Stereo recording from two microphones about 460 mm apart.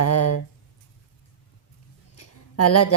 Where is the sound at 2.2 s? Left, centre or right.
Left.